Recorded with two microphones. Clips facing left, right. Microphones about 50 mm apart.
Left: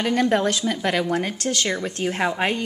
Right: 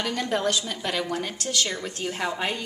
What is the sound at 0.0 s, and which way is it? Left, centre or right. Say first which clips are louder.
A woman's voice: left 6 dB; left.